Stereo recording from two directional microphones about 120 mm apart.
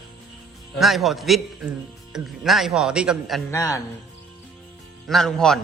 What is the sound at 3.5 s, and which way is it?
Speech, 25° left (ahead or behind).